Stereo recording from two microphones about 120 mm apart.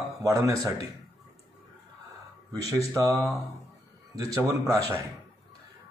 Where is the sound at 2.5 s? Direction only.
25° right (ahead or behind).